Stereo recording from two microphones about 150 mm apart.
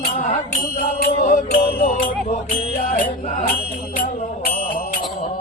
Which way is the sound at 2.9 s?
60° left (ahead or behind).